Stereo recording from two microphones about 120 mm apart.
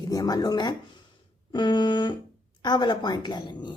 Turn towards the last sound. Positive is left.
turn(degrees=35)  # may be behind; listen again after turning